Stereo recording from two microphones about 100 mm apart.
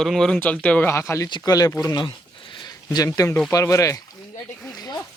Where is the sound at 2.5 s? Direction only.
45° left (ahead or behind).